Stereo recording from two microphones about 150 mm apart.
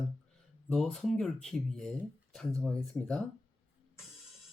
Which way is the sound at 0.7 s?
5° left (ahead or behind).